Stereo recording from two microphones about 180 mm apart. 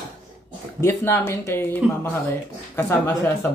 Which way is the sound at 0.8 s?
15° left (ahead or behind).